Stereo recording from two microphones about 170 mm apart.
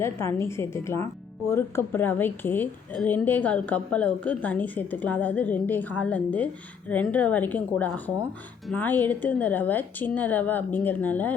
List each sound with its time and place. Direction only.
0.0 s a woman's voice: 15° left (ahead or behind)